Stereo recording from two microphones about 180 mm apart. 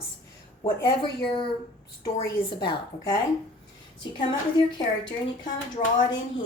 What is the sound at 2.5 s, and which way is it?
Speech, 25° left (ahead or behind).